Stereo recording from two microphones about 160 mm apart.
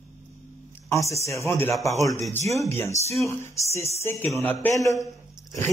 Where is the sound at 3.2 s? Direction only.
20° left (ahead or behind).